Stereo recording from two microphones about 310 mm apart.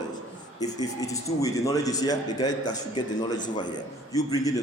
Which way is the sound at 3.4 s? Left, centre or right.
Left.